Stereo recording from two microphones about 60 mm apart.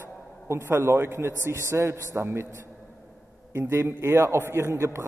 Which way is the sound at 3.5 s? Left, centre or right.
Right.